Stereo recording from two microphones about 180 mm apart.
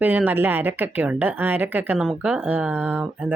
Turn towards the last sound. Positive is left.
turn(degrees=-10)  # may be behind; listen again after turning